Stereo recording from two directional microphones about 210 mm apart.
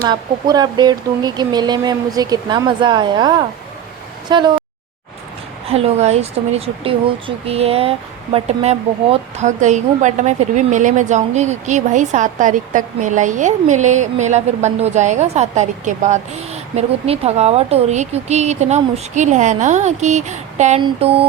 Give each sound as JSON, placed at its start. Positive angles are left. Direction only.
{"t": 0.1, "sound": "speech", "side_deg": -20}
{"t": 5.6, "sound": "speech", "side_deg": -30}